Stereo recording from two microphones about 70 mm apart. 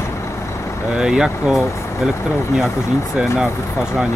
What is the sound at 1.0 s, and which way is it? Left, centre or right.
Speech, centre.